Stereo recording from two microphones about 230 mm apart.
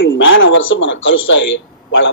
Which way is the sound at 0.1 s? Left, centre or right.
Left.